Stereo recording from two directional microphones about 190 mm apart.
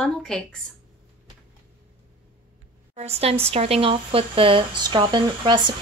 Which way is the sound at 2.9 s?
35° right (ahead or behind).